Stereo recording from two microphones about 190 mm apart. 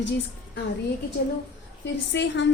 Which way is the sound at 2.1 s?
65° left (ahead or behind).